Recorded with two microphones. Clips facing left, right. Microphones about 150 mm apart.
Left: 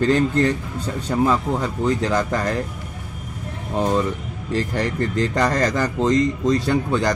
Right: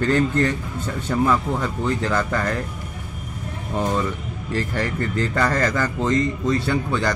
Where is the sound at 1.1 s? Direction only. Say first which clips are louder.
Left 1 dB; 25° left (ahead or behind).